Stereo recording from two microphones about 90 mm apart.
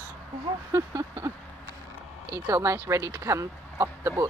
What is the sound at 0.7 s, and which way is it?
Speech, 30° right (ahead or behind).